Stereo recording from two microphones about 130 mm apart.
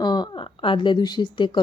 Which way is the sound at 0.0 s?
35° left (ahead or behind).